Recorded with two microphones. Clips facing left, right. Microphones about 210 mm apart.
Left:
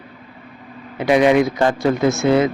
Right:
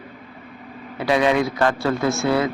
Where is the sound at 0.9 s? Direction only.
20° left (ahead or behind).